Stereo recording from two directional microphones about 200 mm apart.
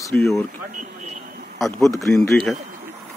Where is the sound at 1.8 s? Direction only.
Centre (ahead or behind).